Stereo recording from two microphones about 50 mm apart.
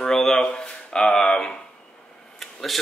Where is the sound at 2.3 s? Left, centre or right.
Centre.